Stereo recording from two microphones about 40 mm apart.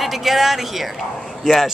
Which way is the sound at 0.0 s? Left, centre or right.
Centre.